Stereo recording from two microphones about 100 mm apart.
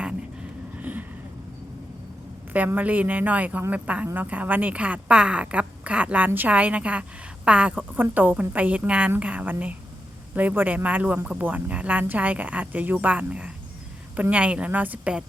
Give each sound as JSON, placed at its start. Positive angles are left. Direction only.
{"t": 0.8, "sound": "vehicle", "side_deg": -15}
{"t": 2.5, "sound": "speech", "side_deg": -15}